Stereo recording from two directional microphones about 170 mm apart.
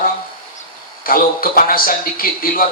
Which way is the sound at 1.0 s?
60° left (ahead or behind).